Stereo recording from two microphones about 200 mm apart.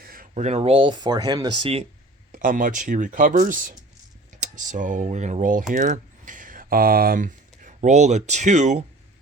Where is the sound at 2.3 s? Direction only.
40° right (ahead or behind).